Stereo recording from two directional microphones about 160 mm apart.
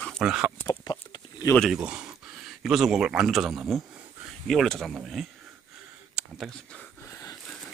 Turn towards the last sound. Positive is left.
turn(degrees=0)  # may be behind; listen again after turning